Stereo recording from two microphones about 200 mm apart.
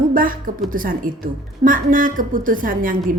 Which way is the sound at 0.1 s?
45° right (ahead or behind).